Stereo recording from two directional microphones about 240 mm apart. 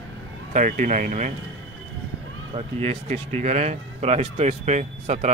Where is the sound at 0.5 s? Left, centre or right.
Right.